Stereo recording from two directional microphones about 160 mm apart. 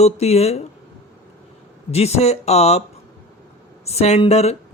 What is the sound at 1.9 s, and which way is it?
Speech, 40° left (ahead or behind).